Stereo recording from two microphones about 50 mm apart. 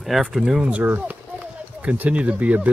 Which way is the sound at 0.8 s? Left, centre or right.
Right.